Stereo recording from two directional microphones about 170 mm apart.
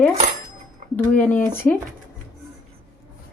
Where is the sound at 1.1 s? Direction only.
10° left (ahead or behind).